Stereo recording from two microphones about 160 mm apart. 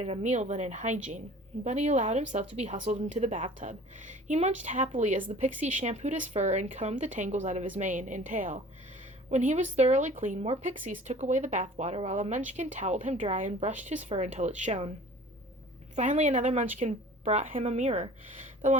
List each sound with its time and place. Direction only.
0.0 s speech: 45° right (ahead or behind)
16.0 s speech: 45° right (ahead or behind)